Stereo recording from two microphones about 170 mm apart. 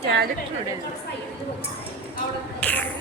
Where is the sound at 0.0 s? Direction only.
75° right (ahead or behind).